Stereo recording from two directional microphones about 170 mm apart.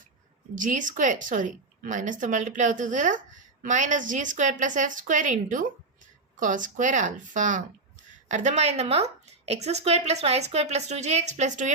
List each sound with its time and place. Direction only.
0.5 s a woman's voice: 50° right (ahead or behind)